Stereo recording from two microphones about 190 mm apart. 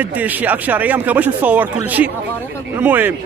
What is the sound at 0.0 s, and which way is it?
Speech, 10° right (ahead or behind).